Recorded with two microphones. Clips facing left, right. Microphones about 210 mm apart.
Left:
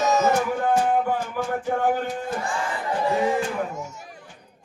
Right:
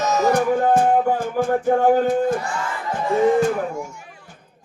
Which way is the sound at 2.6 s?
30° left (ahead or behind).